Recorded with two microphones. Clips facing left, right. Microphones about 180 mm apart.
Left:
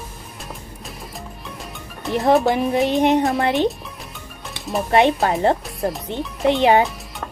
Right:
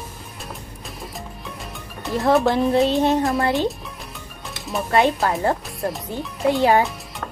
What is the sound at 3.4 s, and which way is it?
Music, 20° left (ahead or behind).